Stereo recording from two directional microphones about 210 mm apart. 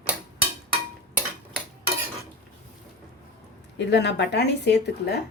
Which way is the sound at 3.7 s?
55° left (ahead or behind).